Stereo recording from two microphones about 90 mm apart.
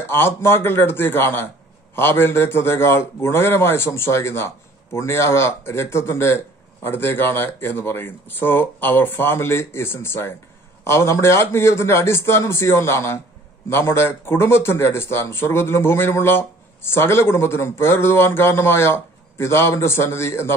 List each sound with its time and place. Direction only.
0.1 s speech: 25° left (ahead or behind)